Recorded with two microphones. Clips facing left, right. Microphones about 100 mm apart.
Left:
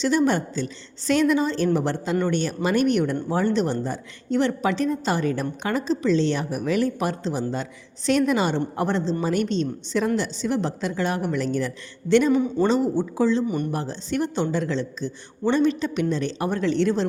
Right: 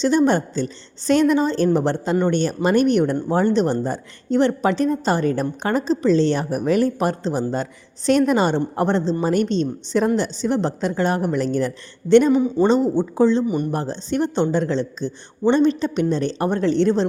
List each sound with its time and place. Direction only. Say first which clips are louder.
0.0 s a woman's voice: right 4 dB; 35° right (ahead or behind)